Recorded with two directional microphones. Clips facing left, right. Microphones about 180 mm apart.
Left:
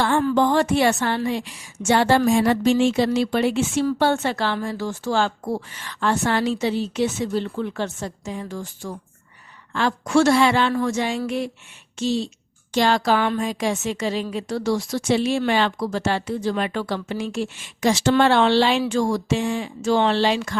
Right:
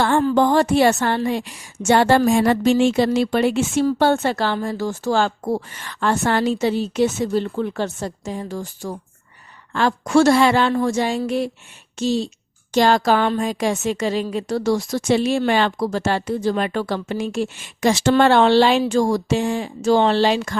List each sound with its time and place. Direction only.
0.3 s a woman's voice: 40° right (ahead or behind)